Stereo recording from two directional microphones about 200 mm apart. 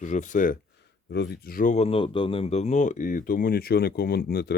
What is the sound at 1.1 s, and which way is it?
Speech, 55° left (ahead or behind).